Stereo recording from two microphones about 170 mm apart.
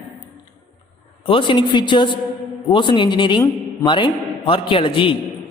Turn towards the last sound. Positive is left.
turn(degrees=30)  # may be behind; listen again after turning